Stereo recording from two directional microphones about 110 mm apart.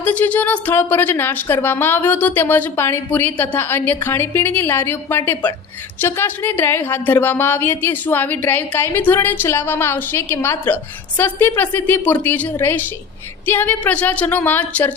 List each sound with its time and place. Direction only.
0.0 s a woman's voice: 15° left (ahead or behind)